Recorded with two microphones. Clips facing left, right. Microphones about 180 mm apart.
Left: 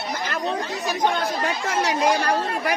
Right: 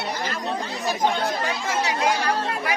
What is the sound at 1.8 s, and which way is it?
Speech, 50° left (ahead or behind).